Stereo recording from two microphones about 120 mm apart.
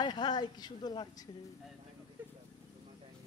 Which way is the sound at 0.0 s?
35° left (ahead or behind).